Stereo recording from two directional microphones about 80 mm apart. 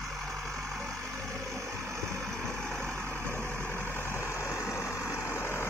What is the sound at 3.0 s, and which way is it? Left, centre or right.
Vehicle, centre.